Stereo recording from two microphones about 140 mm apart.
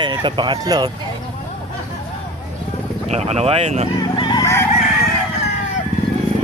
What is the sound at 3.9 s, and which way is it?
Chicken, 30° left (ahead or behind).